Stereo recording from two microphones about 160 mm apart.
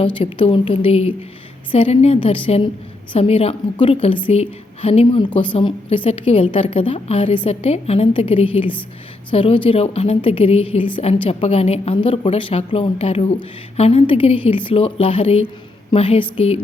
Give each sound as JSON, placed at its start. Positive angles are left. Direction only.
{"t": 0.2, "sound": "a woman's voice", "side_deg": 35}